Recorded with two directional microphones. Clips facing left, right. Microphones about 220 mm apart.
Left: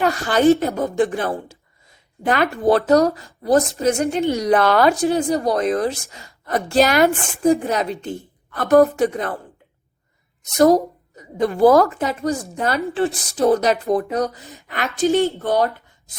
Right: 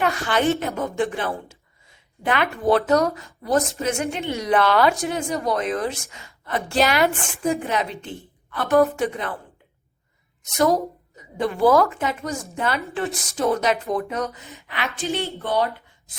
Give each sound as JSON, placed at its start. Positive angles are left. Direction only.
{"t": 0.0, "sound": "a woman's voice", "side_deg": 40}
{"t": 10.6, "sound": "a woman's voice", "side_deg": 40}